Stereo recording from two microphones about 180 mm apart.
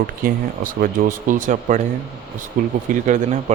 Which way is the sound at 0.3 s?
50° right (ahead or behind).